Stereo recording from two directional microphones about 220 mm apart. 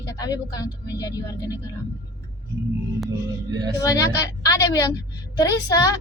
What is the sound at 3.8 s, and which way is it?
A woman's voice, 15° left (ahead or behind).